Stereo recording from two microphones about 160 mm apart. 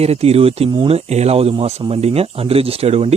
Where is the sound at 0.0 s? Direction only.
40° right (ahead or behind).